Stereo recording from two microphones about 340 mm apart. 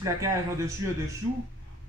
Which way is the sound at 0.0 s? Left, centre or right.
Centre.